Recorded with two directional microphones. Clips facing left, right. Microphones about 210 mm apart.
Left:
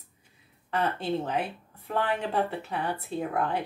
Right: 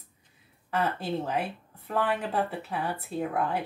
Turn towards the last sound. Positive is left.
turn(degrees=-5)  # may be behind; listen again after turning